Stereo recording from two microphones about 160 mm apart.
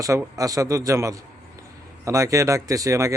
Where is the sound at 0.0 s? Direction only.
20° right (ahead or behind).